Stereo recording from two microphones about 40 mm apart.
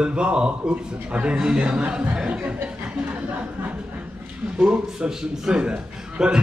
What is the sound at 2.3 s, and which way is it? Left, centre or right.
Speech, right.